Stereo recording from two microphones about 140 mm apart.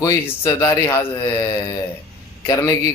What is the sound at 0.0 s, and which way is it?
A man's voice, 25° left (ahead or behind).